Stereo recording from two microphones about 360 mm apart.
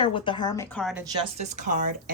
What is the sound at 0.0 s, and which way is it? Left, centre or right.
Speech, centre.